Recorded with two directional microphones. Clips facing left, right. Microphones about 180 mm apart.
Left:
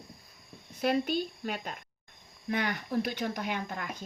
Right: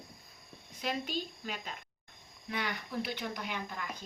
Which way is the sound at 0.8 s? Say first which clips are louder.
Left 8 dB; 55° left (ahead or behind).